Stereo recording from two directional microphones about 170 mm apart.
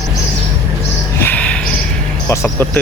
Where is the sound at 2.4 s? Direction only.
10° left (ahead or behind).